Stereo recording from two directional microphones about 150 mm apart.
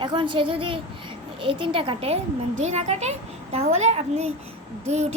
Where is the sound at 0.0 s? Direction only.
35° right (ahead or behind).